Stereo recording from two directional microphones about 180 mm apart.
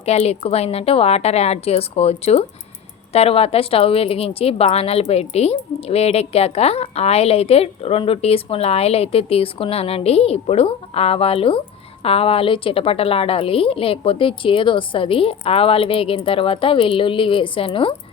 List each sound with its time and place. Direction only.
0.0 s a woman's voice: 35° left (ahead or behind)